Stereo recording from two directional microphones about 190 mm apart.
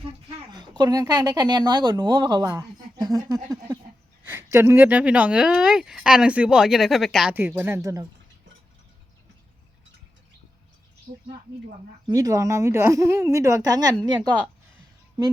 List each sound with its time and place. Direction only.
0.5 s a woman's voice: 20° right (ahead or behind)
11.1 s a sound: 30° right (ahead or behind)
12.0 s a woman's voice: 20° right (ahead or behind)